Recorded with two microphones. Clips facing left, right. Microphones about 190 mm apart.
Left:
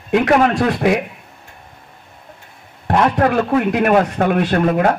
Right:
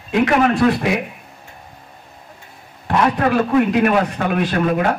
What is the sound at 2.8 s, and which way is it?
A man's voice, 50° left (ahead or behind).